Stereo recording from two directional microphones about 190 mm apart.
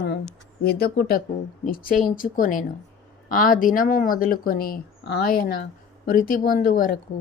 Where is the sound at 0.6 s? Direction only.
55° left (ahead or behind).